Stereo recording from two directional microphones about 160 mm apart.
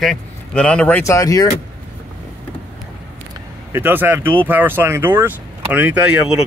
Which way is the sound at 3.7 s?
15° right (ahead or behind).